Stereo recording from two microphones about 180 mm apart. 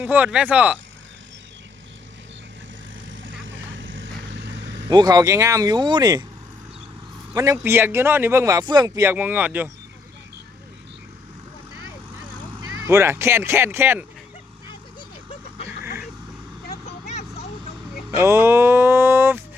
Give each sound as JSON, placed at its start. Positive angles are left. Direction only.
{"t": 0.0, "sound": "speech", "side_deg": -10}
{"t": 3.1, "sound": "vehicle", "side_deg": -90}
{"t": 4.9, "sound": "speech", "side_deg": -20}
{"t": 7.3, "sound": "speech", "side_deg": -15}
{"t": 12.5, "sound": "speech", "side_deg": -15}
{"t": 16.8, "sound": "vehicle", "side_deg": 35}
{"t": 18.1, "sound": "speech", "side_deg": -15}